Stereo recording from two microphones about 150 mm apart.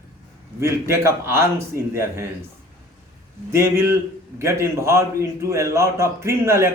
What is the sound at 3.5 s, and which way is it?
A man's voice, 20° right (ahead or behind).